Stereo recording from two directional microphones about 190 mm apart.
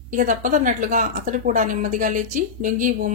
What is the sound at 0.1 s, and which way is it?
Speech, 45° right (ahead or behind).